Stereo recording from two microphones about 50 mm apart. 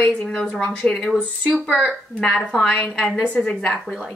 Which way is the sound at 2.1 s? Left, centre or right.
Centre.